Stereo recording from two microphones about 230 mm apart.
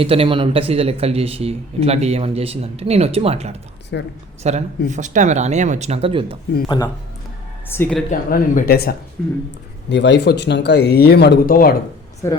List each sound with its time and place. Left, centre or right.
0.0 s speech: right
3.9 s speech: left
4.4 s speech: right
6.7 s a woman's voice: centre
8.1 s speech: left